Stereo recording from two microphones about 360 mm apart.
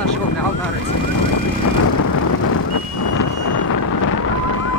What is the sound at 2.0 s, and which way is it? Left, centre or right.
Vehicle, left.